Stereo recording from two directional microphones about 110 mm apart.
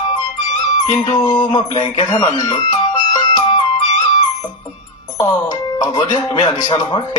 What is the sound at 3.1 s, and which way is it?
Music, 45° left (ahead or behind).